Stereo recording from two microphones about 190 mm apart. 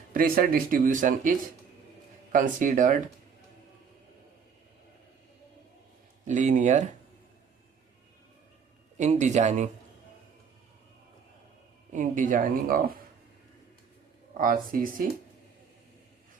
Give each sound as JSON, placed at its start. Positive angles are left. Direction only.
{"t": 0.1, "sound": "speech", "side_deg": -50}
{"t": 6.2, "sound": "speech", "side_deg": -40}
{"t": 9.0, "sound": "speech", "side_deg": -40}
{"t": 11.9, "sound": "speech", "side_deg": -40}
{"t": 14.3, "sound": "speech", "side_deg": -45}